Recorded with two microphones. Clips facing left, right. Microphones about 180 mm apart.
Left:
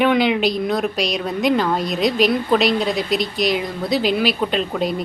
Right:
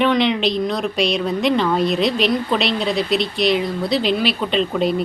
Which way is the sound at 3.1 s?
45° left (ahead or behind).